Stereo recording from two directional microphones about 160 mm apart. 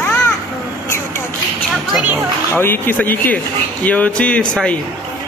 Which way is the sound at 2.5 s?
15° left (ahead or behind).